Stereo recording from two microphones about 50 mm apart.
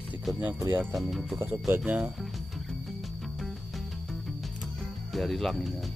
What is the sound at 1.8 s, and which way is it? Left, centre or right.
Speech, right.